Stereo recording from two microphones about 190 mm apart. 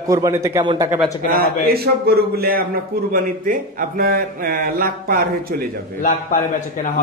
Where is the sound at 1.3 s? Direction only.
55° right (ahead or behind).